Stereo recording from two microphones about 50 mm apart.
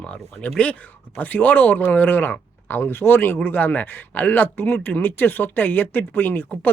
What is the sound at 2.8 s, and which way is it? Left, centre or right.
Speech, left.